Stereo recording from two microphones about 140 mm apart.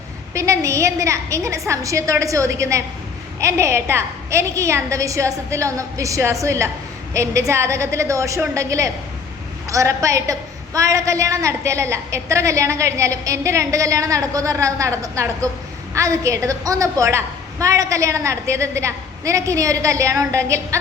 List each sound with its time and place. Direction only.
0.3 s a woman's voice: 20° right (ahead or behind)